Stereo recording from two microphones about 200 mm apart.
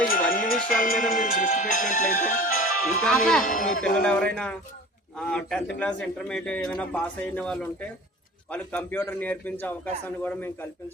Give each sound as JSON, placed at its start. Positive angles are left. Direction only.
{"t": 0.0, "sound": "music", "side_deg": 45}
{"t": 3.4, "sound": "speech", "side_deg": 40}
{"t": 4.0, "sound": "a man's voice", "side_deg": 5}